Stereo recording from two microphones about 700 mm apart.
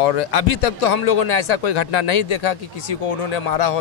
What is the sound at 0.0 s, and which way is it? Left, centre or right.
A man's voice, left.